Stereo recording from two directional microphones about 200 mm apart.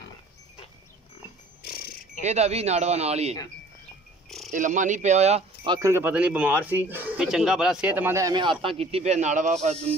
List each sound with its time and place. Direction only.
1.6 s a sound: 50° left (ahead or behind)
2.2 s speech: 35° right (ahead or behind)
4.5 s speech: 40° right (ahead or behind)